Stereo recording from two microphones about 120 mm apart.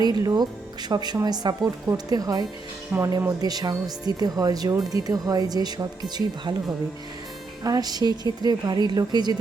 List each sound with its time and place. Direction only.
0.0 s speech: 30° right (ahead or behind)
7.6 s speech: 30° right (ahead or behind)